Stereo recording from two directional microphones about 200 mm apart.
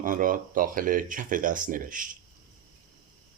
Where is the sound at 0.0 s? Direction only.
45° right (ahead or behind).